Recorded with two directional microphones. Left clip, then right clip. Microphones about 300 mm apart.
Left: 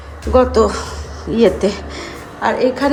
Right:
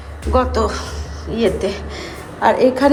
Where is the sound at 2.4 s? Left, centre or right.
Centre.